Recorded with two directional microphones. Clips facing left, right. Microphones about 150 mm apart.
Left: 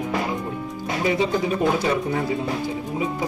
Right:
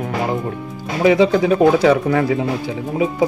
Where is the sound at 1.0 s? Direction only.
90° right.